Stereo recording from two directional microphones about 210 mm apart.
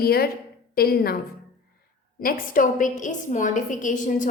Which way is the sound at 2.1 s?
45° left (ahead or behind).